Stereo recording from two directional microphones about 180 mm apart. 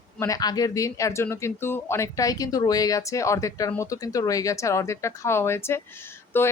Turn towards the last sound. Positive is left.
turn(degrees=10)  # may be behind; listen again after turning